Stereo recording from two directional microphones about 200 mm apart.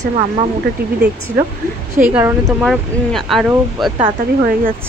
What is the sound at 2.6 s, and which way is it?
Speech, centre (ahead or behind).